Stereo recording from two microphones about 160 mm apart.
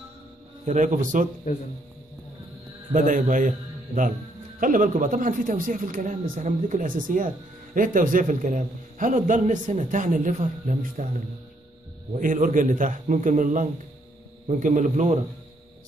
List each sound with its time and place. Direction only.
0.7 s a man's voice: 50° right (ahead or behind)
2.9 s a man's voice: 55° right (ahead or behind)